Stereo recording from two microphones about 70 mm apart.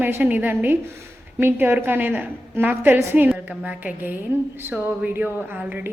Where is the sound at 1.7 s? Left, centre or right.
Right.